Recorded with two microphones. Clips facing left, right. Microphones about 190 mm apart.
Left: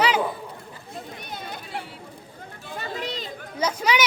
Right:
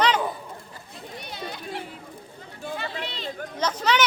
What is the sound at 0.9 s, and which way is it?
Chatter, 50° left (ahead or behind).